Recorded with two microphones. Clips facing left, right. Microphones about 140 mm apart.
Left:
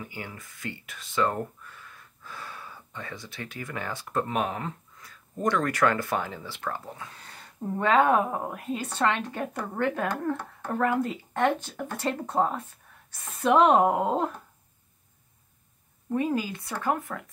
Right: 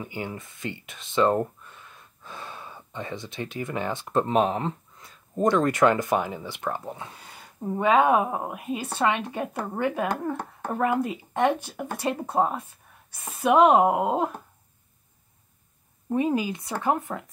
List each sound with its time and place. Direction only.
0.0 s speech: 25° right (ahead or behind)
16.1 s speech: 20° right (ahead or behind)